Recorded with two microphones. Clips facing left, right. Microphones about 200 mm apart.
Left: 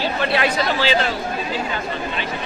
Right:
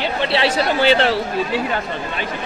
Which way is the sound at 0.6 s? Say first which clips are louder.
Right 4 dB; 65° right (ahead or behind).